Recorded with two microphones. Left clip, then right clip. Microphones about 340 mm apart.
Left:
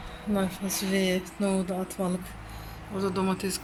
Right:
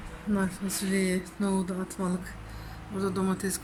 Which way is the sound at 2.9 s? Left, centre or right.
Centre.